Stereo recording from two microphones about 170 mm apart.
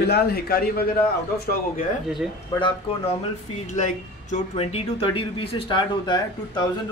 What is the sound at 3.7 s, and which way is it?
Speech, 45° left (ahead or behind).